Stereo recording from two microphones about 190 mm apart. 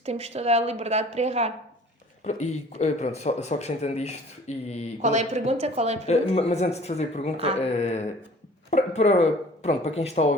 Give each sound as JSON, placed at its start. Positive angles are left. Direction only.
{"t": 0.0, "sound": "a woman's voice", "side_deg": -35}
{"t": 2.2, "sound": "speech", "side_deg": 35}
{"t": 5.0, "sound": "a woman's voice", "side_deg": -35}
{"t": 6.1, "sound": "speech", "side_deg": 35}